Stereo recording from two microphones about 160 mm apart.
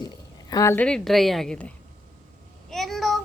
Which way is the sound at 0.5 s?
15° left (ahead or behind).